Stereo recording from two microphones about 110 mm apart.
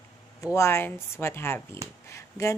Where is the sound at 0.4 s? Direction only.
25° left (ahead or behind).